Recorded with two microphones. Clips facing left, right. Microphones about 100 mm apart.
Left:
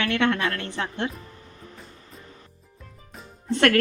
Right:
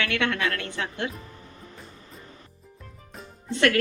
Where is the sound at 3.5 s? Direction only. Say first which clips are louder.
Left 2 dB; 50° left (ahead or behind).